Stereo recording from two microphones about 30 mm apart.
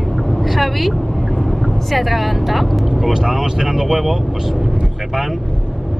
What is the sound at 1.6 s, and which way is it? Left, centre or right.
Speech, centre.